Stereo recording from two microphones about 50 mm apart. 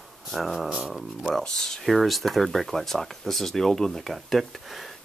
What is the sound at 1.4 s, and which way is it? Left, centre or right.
Speech, centre.